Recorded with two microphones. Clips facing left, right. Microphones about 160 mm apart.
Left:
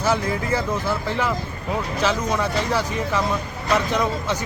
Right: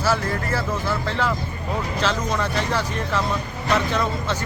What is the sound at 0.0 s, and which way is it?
Speech, 15° left (ahead or behind).